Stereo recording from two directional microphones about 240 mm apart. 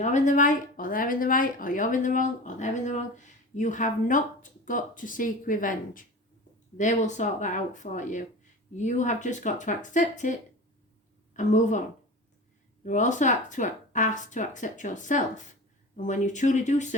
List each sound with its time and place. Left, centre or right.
0.0 s speech: left
11.3 s speech: left
12.8 s speech: left